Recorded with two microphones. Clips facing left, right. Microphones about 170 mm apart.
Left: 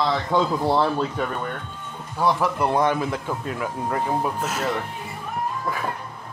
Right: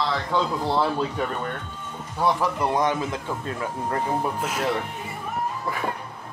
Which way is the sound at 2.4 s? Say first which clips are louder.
Left 2 dB; 10° left (ahead or behind).